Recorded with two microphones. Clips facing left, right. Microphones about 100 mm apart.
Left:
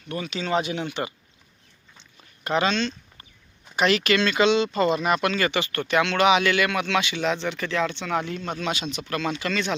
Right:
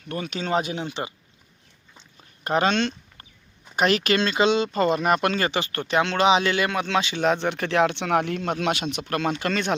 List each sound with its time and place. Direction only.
0.1 s speech: 45° right (ahead or behind)
2.4 s speech: 40° right (ahead or behind)
3.8 s speech: 40° right (ahead or behind)
7.2 s speech: 50° right (ahead or behind)